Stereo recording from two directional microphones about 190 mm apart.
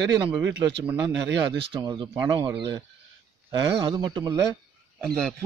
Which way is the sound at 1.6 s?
25° right (ahead or behind).